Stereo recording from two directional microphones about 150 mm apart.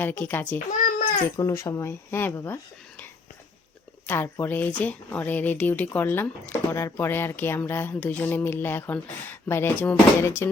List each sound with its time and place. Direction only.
0.0 s speech: 15° left (ahead or behind)
0.7 s babbling: 70° left (ahead or behind)
1.4 s speech: 20° left (ahead or behind)
4.0 s speech: 15° left (ahead or behind)